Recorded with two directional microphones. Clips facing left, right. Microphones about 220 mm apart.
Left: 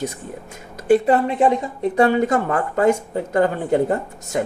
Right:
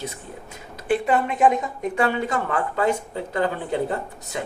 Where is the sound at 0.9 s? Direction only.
35° left (ahead or behind).